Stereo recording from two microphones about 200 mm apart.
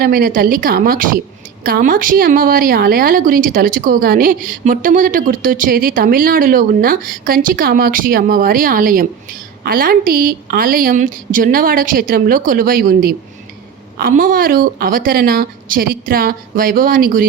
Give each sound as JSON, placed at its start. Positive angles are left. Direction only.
{"t": 0.0, "sound": "a woman's voice", "side_deg": -45}